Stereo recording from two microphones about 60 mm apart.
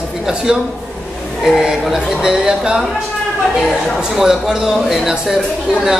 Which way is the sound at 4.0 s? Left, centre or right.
Centre.